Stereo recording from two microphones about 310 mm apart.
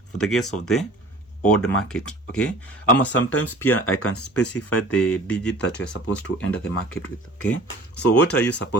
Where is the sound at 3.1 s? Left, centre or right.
Left.